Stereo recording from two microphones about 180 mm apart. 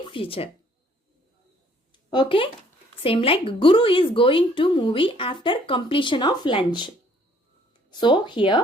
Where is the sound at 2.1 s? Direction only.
25° left (ahead or behind).